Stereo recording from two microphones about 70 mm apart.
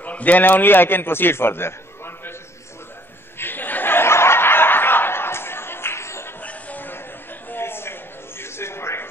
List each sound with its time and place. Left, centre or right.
0.0 s a man's voice: left
3.3 s laughter: left
6.4 s a sound: left